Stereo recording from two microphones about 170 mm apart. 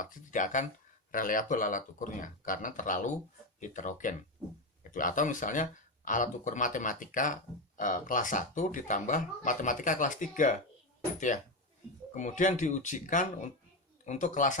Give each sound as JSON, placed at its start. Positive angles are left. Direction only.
{"t": 0.0, "sound": "speech", "side_deg": 50}
{"t": 12.1, "sound": "speech", "side_deg": 45}